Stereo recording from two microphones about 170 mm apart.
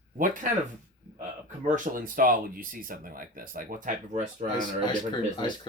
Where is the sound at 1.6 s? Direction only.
50° right (ahead or behind).